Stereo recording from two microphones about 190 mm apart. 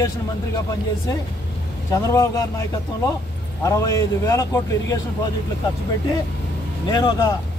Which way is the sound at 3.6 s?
15° left (ahead or behind).